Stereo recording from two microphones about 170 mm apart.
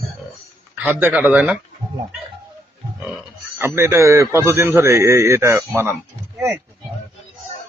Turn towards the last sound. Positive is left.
turn(degrees=-15)  # may be behind; listen again after turning